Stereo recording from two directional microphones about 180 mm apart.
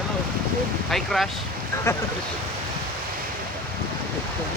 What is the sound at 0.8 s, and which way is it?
Speech, centre (ahead or behind).